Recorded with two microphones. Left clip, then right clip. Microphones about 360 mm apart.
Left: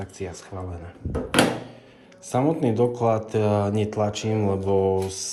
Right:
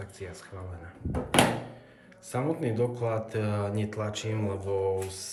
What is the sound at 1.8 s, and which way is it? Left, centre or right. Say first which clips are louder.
Speech: left 6 dB; centre.